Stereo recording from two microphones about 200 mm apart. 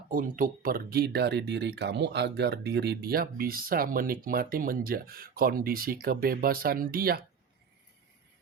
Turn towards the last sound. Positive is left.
turn(degrees=-50)  # may be behind; listen again after turning